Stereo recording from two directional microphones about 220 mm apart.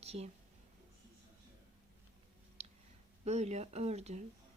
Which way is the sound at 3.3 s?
30° right (ahead or behind).